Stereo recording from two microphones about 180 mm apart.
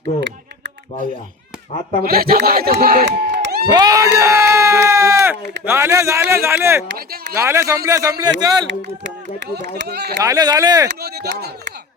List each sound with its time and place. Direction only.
2.0 s speech: 55° right (ahead or behind)
3.7 s speech: 20° right (ahead or behind)
6.8 s speech: 65° right (ahead or behind)
7.3 s a man's voice: 15° right (ahead or behind)
9.6 s speech: 65° right (ahead or behind)
10.2 s a man's voice: 20° right (ahead or behind)
11.0 s speech: 60° right (ahead or behind)